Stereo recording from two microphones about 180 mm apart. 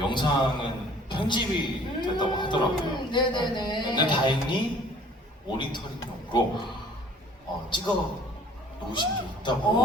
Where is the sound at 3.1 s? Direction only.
25° left (ahead or behind).